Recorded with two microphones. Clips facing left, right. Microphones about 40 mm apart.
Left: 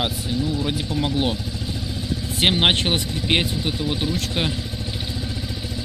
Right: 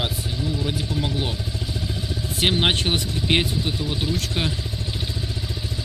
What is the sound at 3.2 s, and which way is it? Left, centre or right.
Speech, centre.